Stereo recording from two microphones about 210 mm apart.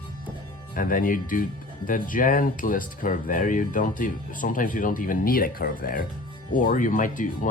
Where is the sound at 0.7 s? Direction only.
40° left (ahead or behind).